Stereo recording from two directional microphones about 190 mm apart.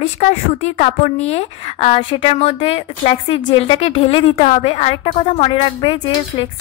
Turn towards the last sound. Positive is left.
turn(degrees=30)  # may be behind; listen again after turning